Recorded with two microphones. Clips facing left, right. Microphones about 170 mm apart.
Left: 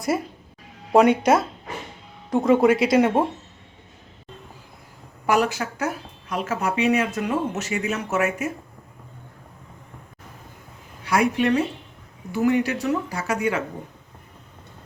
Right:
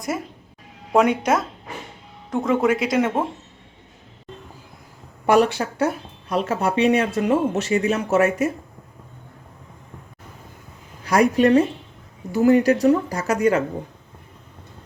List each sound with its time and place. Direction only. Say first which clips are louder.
0.9 s speech: left 2 dB; centre (ahead or behind)
5.2 s speech: right 4 dB; 30° right (ahead or behind)
11.0 s a woman's voice: right 4 dB; 40° right (ahead or behind)